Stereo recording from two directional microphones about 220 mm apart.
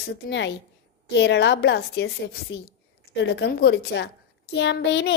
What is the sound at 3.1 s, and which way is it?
A woman's voice, 50° left (ahead or behind).